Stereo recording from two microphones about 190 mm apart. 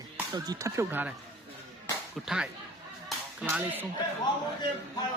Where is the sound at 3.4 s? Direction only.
10° right (ahead or behind).